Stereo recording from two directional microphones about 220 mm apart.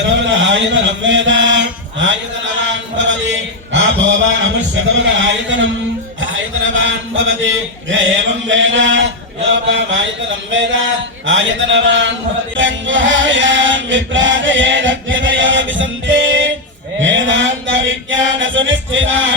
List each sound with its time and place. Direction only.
0.0 s chant: 60° right (ahead or behind)
3.0 s a sound: 55° right (ahead or behind)
4.7 s mantra: 60° right (ahead or behind)
6.1 s a man's voice: 60° right (ahead or behind)
9.6 s mantra: 55° right (ahead or behind)
12.5 s chant: 60° right (ahead or behind)
17.0 s mantra: 55° right (ahead or behind)